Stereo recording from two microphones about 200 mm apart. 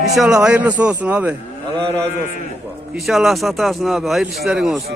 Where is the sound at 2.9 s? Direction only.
Centre (ahead or behind).